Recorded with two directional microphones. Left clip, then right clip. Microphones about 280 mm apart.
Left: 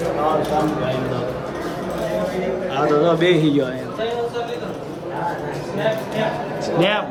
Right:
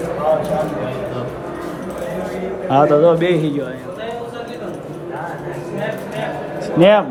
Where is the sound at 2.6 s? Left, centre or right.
Centre.